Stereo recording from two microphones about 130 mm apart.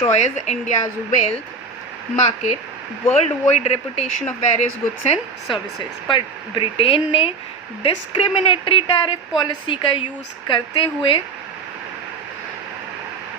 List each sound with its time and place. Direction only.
0.1 s speech: 60° left (ahead or behind)
6.1 s a woman's voice: 40° left (ahead or behind)